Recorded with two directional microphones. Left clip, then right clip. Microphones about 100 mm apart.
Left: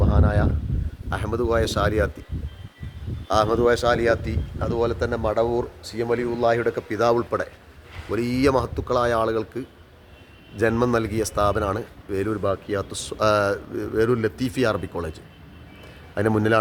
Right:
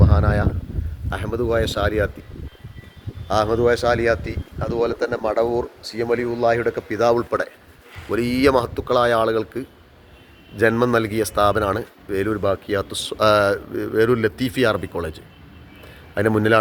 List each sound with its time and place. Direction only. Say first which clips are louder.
0.0 s a sound: right 2 dB; 25° right (ahead or behind)
1.1 s speech: right 1 dB; 10° right (ahead or behind)
3.2 s speech: right 1 dB; 15° right (ahead or behind)